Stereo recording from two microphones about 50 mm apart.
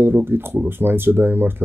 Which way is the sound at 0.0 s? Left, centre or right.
Right.